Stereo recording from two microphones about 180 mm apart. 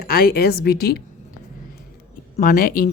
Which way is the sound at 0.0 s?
55° left (ahead or behind).